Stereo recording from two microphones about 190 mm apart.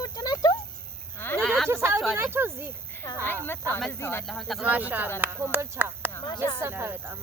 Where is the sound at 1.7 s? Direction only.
15° right (ahead or behind).